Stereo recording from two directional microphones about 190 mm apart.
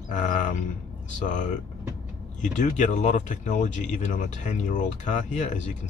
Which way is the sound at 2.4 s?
40° left (ahead or behind).